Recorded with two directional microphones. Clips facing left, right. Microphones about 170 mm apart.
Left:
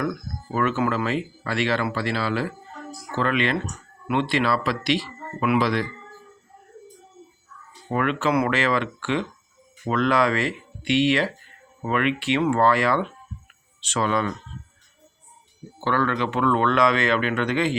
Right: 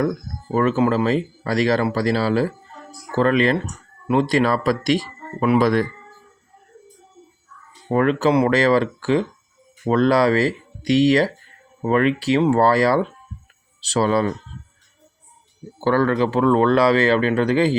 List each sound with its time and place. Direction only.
0.0 s speech: 30° right (ahead or behind)
7.9 s speech: 35° right (ahead or behind)
15.8 s speech: 40° right (ahead or behind)